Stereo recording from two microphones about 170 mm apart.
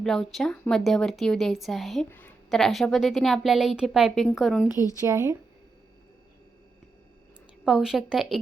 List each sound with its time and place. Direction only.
0.0 s a woman's voice: 5° left (ahead or behind)
2.0 s a woman's voice: 10° left (ahead or behind)
2.5 s a woman's voice: centre (ahead or behind)
4.9 s speech: 15° right (ahead or behind)
7.6 s a woman's voice: centre (ahead or behind)